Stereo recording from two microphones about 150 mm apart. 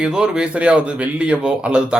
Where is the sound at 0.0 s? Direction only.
5° right (ahead or behind).